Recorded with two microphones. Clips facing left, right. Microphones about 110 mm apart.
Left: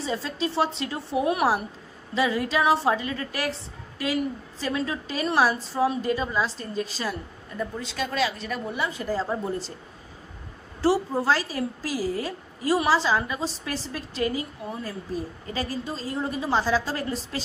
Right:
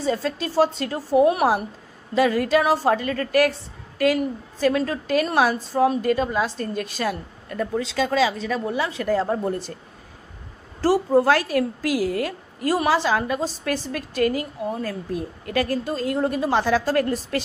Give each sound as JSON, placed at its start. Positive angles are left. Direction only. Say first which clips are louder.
{"t": 0.0, "sound": "a woman's voice", "louder": "right 4 dB", "side_deg": -50}
{"t": 10.8, "sound": "a woman's voice", "louder": "right 5 dB", "side_deg": -50}